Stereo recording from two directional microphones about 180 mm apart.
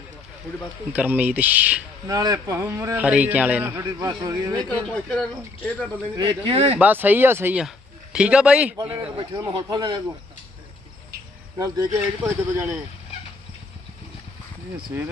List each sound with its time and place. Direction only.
0.9 s a man's voice: 10° right (ahead or behind)
2.0 s a man's voice: 20° right (ahead or behind)
3.8 s a man's voice: 25° right (ahead or behind)
4.7 s speech: 5° left (ahead or behind)
6.1 s speech: 30° right (ahead or behind)
6.7 s a man's voice: 10° right (ahead or behind)
8.8 s a man's voice: 20° right (ahead or behind)
11.5 s a man's voice: 20° right (ahead or behind)